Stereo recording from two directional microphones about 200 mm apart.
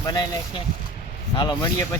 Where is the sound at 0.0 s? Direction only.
20° left (ahead or behind).